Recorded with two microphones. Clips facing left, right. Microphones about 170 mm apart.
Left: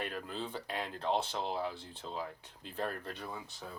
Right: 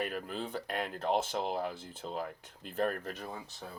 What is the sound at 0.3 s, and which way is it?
Speech, 50° right (ahead or behind).